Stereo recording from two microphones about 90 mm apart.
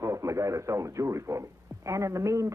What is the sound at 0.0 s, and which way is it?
A man's voice, 35° right (ahead or behind).